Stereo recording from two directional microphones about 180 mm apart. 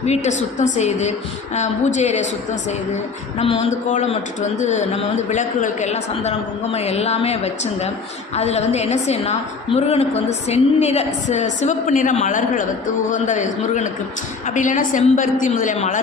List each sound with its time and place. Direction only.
0.0 s a woman's voice: 40° left (ahead or behind)